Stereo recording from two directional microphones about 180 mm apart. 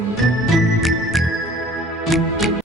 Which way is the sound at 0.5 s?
Centre (ahead or behind).